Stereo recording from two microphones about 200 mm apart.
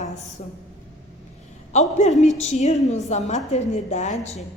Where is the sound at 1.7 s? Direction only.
35° left (ahead or behind).